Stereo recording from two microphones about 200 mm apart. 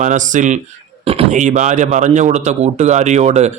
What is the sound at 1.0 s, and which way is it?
Speech, 30° right (ahead or behind).